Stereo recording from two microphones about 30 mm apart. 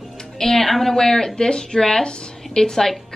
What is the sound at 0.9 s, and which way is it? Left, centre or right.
A woman's voice, centre.